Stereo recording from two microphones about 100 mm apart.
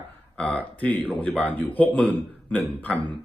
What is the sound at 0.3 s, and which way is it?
Speech, 15° left (ahead or behind).